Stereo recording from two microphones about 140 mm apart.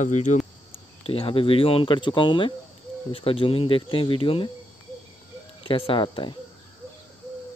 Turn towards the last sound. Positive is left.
turn(degrees=35)  # may be behind; listen again after turning